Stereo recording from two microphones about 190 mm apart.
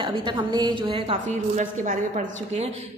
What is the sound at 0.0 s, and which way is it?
A woman's voice, 25° right (ahead or behind).